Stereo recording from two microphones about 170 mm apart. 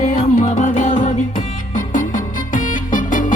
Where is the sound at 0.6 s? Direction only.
45° left (ahead or behind).